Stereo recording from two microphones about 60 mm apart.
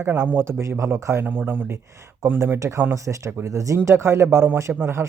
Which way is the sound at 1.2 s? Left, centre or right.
Right.